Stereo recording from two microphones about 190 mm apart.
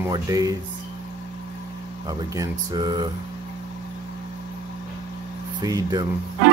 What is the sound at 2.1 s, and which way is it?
Speech, 20° right (ahead or behind).